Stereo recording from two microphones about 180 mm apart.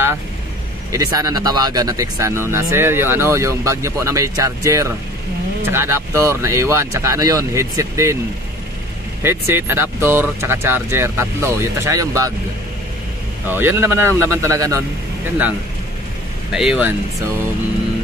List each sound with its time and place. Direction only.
0.9 s speech: 20° right (ahead or behind)
9.2 s speech: 15° right (ahead or behind)
13.5 s speech: 10° right (ahead or behind)
16.5 s speech: 5° right (ahead or behind)